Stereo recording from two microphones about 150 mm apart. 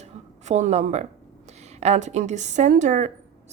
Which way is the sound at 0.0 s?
50° right (ahead or behind).